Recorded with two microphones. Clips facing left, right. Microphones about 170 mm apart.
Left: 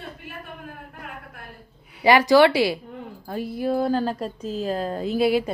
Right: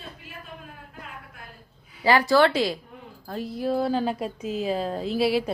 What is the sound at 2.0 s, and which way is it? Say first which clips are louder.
Speech: left 4 dB; 15° left (ahead or behind).